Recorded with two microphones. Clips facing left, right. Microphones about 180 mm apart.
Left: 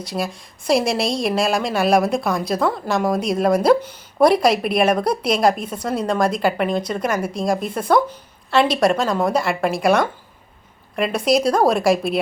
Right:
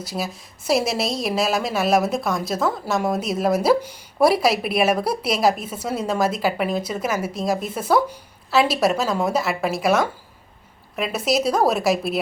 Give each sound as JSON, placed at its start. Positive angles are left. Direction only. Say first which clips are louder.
{"t": 0.0, "sound": "a woman's voice", "louder": "left 3 dB", "side_deg": -5}